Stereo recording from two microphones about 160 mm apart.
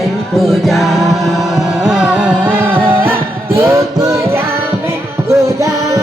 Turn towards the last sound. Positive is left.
turn(degrees=-20)  # may be behind; listen again after turning